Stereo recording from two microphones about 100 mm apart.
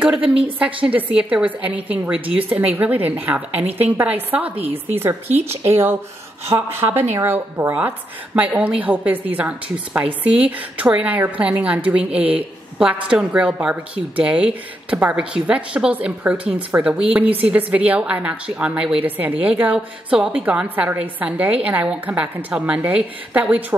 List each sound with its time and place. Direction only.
0.8 s a woman's voice: 15° right (ahead or behind)